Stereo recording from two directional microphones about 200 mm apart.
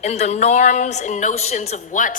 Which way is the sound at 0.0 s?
35° left (ahead or behind).